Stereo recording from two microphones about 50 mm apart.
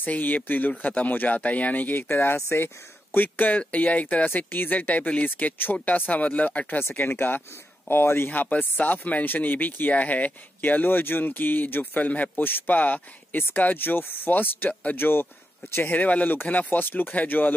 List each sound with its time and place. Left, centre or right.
0.0 s speech: left
2.0 s speech: left
3.2 s speech: left
6.8 s speech: left
8.3 s speech: left
14.7 s speech: left
15.0 s speech: left
15.7 s speech: left